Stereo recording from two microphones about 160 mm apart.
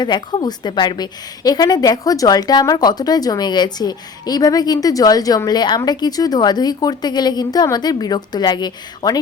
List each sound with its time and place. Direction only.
0.0 s a woman's voice: 25° left (ahead or behind)